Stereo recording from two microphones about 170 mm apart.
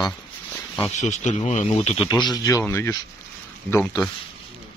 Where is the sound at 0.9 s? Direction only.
45° left (ahead or behind).